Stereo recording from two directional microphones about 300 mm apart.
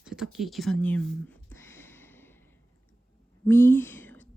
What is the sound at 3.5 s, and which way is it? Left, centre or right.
Speech, centre.